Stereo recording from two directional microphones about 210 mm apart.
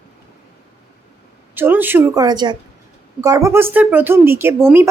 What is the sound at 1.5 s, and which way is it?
Speech, 10° right (ahead or behind).